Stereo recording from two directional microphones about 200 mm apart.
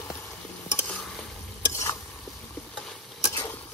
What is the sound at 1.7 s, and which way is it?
Stir, 15° left (ahead or behind).